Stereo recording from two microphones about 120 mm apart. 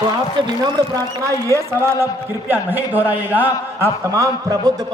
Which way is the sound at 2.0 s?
15° right (ahead or behind).